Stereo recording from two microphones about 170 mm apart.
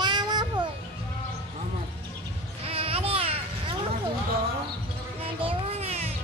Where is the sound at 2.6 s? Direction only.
35° right (ahead or behind).